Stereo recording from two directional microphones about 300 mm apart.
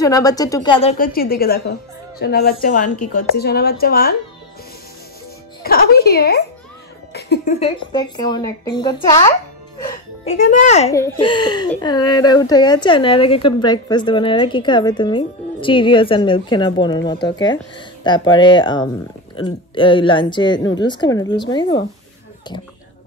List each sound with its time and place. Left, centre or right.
0.0 s a woman's voice: centre; by 4.1 s left
5.6 s speech: left
7.6 s speech: centre
9.8 s music: centre
10.3 s a woman's voice: left
10.9 s speech: centre